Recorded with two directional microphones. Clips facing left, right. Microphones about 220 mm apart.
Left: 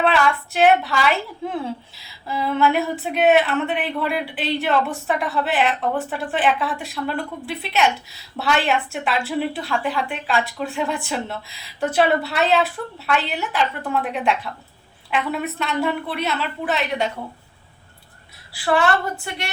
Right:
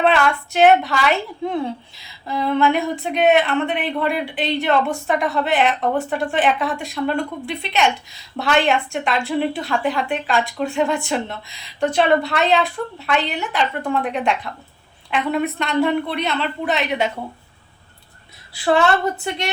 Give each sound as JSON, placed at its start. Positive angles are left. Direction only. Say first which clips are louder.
{"t": 0.0, "sound": "a woman's voice", "louder": "right 2 dB", "side_deg": 0}
{"t": 18.5, "sound": "a woman's voice", "louder": "right 2 dB", "side_deg": -20}